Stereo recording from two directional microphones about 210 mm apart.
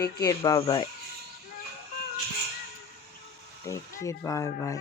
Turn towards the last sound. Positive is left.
turn(degrees=15)  # may be behind; listen again after turning